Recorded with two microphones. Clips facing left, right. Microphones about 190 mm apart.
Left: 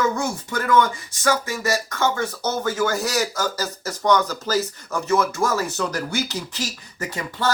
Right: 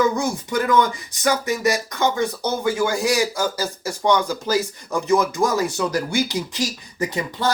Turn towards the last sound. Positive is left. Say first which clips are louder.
# right 3 dB
turn(degrees=-15)  # may be behind; listen again after turning